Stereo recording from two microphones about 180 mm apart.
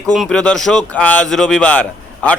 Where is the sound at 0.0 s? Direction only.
5° left (ahead or behind).